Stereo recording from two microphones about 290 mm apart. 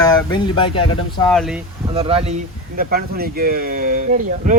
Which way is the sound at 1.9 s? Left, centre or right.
Centre.